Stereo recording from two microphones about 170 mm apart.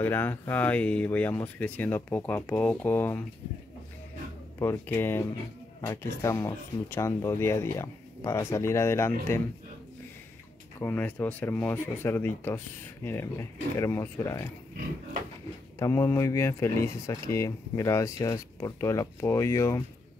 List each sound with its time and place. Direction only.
0.0 s speech: 10° left (ahead or behind)
4.6 s speech: 15° left (ahead or behind)
10.8 s speech: 10° left (ahead or behind)
15.8 s speech: 20° left (ahead or behind)